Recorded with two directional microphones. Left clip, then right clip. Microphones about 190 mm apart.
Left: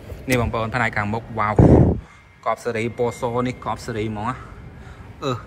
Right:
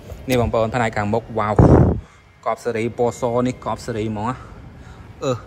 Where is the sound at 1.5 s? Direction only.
30° left (ahead or behind).